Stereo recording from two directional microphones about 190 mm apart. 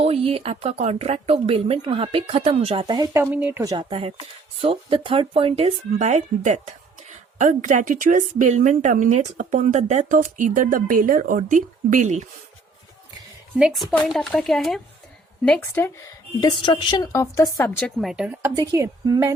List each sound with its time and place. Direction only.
0.0 s speech: 30° right (ahead or behind)
13.6 s speech: 5° right (ahead or behind)
16.4 s a woman's voice: 25° left (ahead or behind)
17.7 s speech: 5° left (ahead or behind)
18.5 s speech: 15° right (ahead or behind)